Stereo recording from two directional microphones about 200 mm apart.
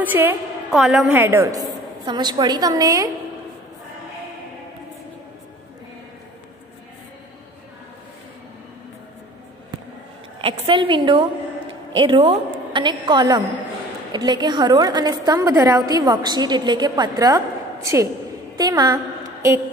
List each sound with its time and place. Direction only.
0.0 s a woman's voice: 10° right (ahead or behind)
10.4 s a woman's voice: 25° right (ahead or behind)
18.6 s a woman's voice: 20° right (ahead or behind)